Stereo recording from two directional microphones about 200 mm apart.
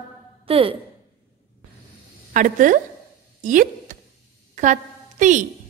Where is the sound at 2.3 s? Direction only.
40° right (ahead or behind).